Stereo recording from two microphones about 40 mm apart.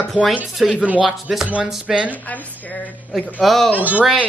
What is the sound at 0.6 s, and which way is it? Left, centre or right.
Speech, centre.